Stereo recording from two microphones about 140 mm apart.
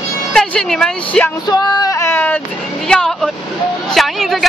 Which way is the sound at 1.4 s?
30° left (ahead or behind).